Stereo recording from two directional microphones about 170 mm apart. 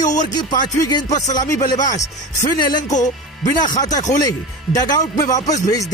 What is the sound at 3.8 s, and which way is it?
Speech, 20° left (ahead or behind).